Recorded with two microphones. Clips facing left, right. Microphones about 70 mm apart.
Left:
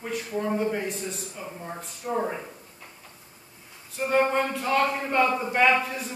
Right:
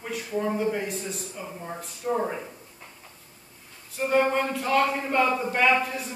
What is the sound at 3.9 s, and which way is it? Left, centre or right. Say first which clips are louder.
A man's voice: even; centre.